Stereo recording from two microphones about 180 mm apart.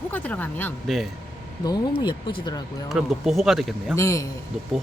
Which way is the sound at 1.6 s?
25° left (ahead or behind).